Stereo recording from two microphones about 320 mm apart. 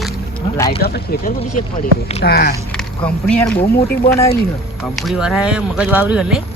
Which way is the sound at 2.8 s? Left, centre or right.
Centre.